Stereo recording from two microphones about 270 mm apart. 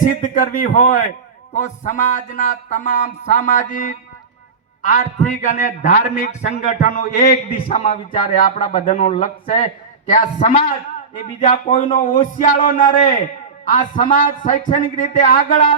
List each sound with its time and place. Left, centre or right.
0.0 s speech: left